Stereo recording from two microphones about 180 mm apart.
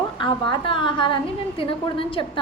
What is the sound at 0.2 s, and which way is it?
A woman's voice, 30° left (ahead or behind).